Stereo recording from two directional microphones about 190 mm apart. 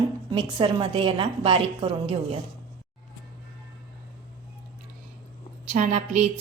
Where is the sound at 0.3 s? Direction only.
25° right (ahead or behind).